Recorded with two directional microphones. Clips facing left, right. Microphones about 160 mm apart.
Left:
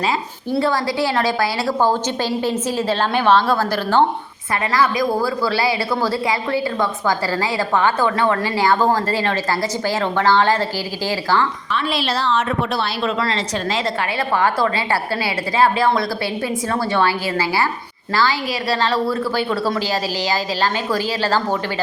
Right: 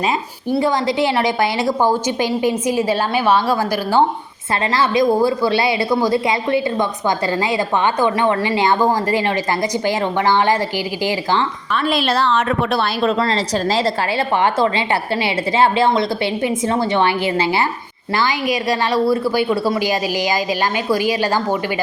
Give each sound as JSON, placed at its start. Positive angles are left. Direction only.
{"t": 0.6, "sound": "a woman's voice", "side_deg": -20}
{"t": 4.7, "sound": "a woman's voice", "side_deg": -25}
{"t": 11.7, "sound": "a woman's voice", "side_deg": -50}
{"t": 13.1, "sound": "a woman's voice", "side_deg": -30}
{"t": 14.3, "sound": "a woman's voice", "side_deg": -25}